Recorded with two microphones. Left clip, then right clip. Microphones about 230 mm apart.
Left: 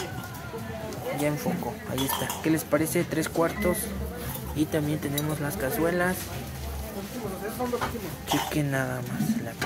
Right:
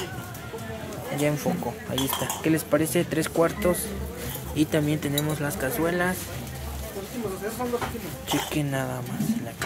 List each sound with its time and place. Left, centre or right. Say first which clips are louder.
1.2 s speech: right 4 dB; centre
8.3 s speech: even; centre